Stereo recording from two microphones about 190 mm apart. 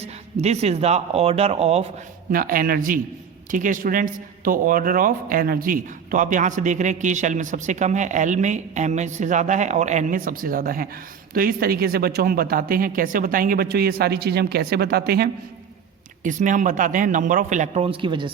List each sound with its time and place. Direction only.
0.0 s speech: 35° right (ahead or behind)
2.3 s speech: 45° right (ahead or behind)
16.2 s speech: 40° right (ahead or behind); by 18.3 s 25° right (ahead or behind)